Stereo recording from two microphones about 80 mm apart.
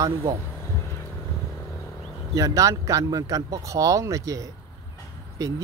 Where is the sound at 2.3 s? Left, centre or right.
Right.